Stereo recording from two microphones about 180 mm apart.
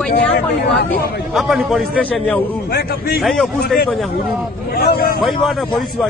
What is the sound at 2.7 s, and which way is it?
Speech, 60° left (ahead or behind).